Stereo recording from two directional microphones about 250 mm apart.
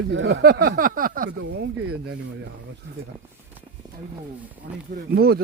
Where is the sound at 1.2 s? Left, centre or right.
Right.